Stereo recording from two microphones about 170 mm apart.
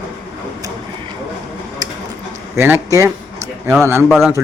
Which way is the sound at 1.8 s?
25° right (ahead or behind).